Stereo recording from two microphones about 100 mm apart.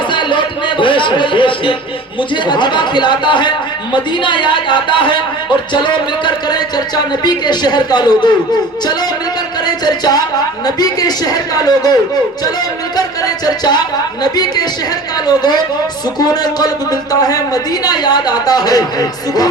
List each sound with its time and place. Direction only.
0.1 s a sound: 50° left (ahead or behind)
2.3 s speech: 50° left (ahead or behind)
9.6 s music: 45° left (ahead or behind)
10.8 s speech: 40° left (ahead or behind)
13.0 s music: 40° left (ahead or behind)
14.2 s speech: 40° left (ahead or behind)